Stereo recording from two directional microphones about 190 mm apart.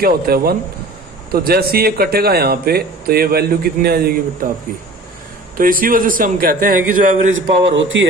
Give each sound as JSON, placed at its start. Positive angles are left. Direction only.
{"t": 0.0, "sound": "a man's voice", "side_deg": -50}
{"t": 5.6, "sound": "a man's voice", "side_deg": -50}
{"t": 7.3, "sound": "speech", "side_deg": -80}